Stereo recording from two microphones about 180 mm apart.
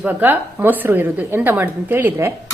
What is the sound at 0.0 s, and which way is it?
A woman's voice, 10° right (ahead or behind).